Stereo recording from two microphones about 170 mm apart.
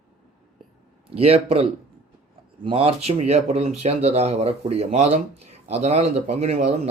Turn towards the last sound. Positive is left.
turn(degrees=-40)  # may be behind; listen again after turning